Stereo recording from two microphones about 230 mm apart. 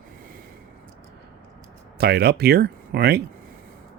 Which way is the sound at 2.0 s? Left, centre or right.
Right.